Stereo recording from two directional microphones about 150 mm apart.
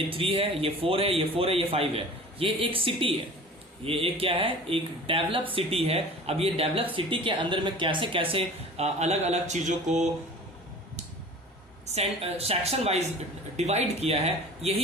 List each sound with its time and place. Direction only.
0.1 s speech: 35° right (ahead or behind)
11.9 s a woman's voice: 45° right (ahead or behind)